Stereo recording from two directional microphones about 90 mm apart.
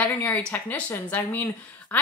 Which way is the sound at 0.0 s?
15° left (ahead or behind).